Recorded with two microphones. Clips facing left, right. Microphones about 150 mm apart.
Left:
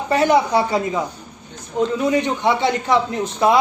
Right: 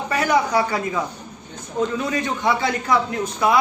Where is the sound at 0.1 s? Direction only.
25° left (ahead or behind).